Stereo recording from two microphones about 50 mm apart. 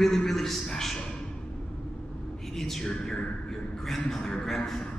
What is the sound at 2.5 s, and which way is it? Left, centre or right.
A man's voice, centre.